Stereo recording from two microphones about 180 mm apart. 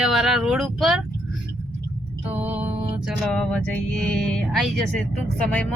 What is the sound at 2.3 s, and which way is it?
Music, 10° right (ahead or behind).